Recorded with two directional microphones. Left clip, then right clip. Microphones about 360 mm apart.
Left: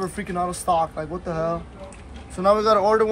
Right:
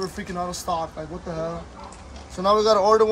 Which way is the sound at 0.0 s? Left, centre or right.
Centre.